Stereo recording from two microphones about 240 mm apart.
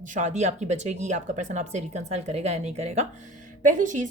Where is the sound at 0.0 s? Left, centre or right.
Right.